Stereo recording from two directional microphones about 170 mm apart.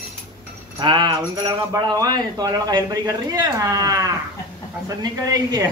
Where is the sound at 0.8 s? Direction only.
25° right (ahead or behind).